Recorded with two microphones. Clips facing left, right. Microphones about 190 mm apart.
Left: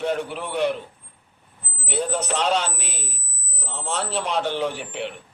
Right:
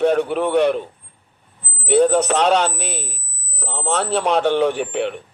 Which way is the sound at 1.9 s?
60° right (ahead or behind).